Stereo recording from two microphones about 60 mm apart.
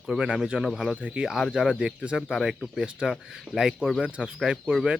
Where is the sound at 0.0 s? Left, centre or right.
Centre.